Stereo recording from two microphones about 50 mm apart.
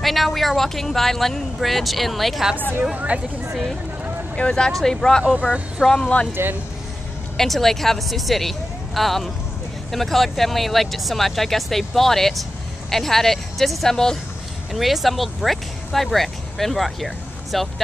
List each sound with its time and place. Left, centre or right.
0.0 s speech: centre
3.1 s speech: right
4.4 s speech: centre
6.4 s speech: right
7.3 s speech: centre
14.7 s speech: centre